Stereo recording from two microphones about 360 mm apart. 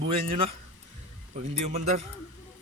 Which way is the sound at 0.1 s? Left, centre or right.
Centre.